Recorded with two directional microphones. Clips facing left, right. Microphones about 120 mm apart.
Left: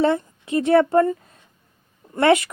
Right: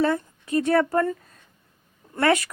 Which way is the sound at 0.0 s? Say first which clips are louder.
Left 3 dB; 25° left (ahead or behind).